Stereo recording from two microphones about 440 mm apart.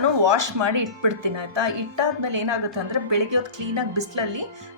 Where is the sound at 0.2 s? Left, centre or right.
Right.